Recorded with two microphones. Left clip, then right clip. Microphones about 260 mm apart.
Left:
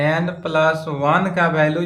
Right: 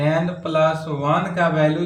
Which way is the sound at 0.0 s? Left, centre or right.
Centre.